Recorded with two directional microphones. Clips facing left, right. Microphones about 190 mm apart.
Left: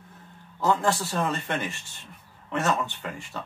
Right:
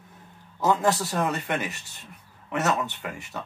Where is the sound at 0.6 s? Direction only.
20° right (ahead or behind).